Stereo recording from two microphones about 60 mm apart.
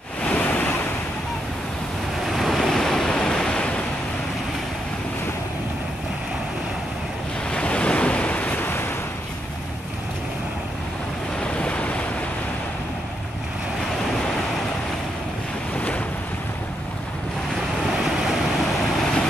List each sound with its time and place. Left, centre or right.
0.2 s waves: left
2.2 s waves: centre
7.5 s waves: centre; by 8.9 s left
11.3 s waves: centre
17.8 s vehicle: centre